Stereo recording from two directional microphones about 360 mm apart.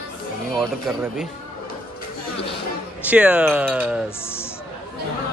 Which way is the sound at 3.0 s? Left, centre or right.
Centre.